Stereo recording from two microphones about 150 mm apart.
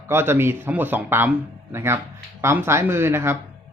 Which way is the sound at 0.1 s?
15° right (ahead or behind).